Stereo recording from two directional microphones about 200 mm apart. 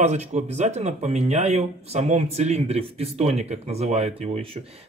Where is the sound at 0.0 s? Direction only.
35° right (ahead or behind).